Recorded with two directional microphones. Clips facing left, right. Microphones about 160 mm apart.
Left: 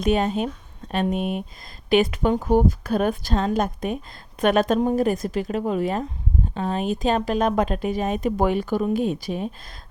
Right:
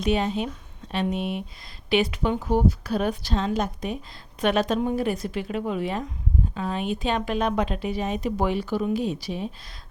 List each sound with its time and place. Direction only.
0.0 s a woman's voice: 45° left (ahead or behind)